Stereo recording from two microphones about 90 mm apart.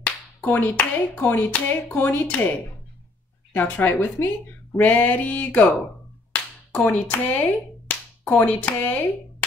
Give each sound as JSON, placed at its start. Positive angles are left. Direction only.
{"t": 0.0, "sound": "clapping", "side_deg": 20}
{"t": 1.5, "sound": "speech", "side_deg": 20}
{"t": 3.5, "sound": "speech", "side_deg": 20}
{"t": 6.8, "sound": "clapping", "side_deg": 15}
{"t": 7.9, "sound": "a sound", "side_deg": 20}